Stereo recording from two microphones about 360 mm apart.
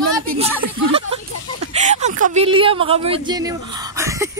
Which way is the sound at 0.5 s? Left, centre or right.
Centre.